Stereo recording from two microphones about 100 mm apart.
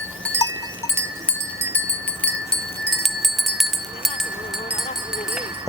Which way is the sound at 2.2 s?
5° left (ahead or behind).